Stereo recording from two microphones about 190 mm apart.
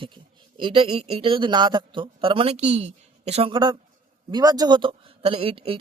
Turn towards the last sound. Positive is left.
turn(degrees=-30)  # may be behind; listen again after turning